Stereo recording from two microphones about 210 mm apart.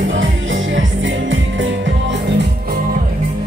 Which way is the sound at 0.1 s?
65° right (ahead or behind).